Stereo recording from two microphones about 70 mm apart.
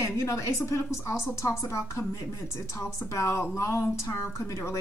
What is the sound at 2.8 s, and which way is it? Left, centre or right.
A woman's voice, left.